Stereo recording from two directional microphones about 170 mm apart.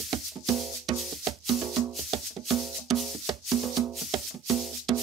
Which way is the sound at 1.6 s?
15° right (ahead or behind).